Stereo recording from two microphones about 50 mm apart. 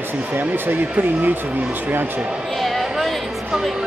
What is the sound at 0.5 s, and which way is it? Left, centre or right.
Speech, right.